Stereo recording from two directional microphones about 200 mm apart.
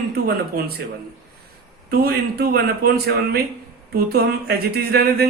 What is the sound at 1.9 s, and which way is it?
A man's voice, 50° right (ahead or behind).